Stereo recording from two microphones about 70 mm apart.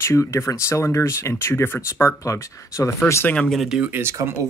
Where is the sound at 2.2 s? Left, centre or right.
Left.